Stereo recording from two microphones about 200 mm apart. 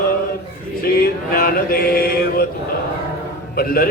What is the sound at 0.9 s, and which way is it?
Mantra, 50° left (ahead or behind).